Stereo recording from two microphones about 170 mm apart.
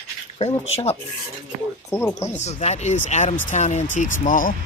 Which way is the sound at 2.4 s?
40° left (ahead or behind).